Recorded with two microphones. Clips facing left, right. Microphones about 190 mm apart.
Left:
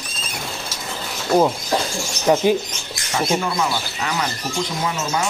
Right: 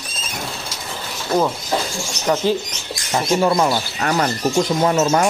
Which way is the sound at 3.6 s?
50° right (ahead or behind).